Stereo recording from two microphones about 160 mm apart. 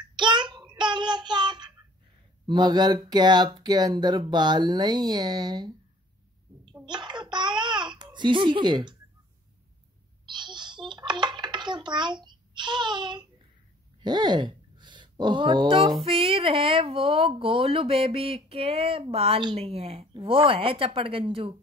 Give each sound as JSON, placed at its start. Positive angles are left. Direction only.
{"t": 0.1, "sound": "child singing", "side_deg": -30}
{"t": 2.4, "sound": "a child's voice", "side_deg": -30}
{"t": 6.9, "sound": "a child's voice", "side_deg": -25}
{"t": 10.2, "sound": "a child's voice", "side_deg": -30}